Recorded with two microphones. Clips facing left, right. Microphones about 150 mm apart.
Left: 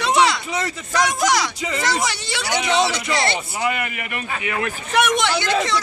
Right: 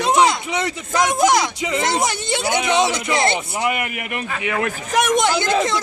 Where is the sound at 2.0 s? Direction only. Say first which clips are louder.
Right 4 dB; 50° right (ahead or behind).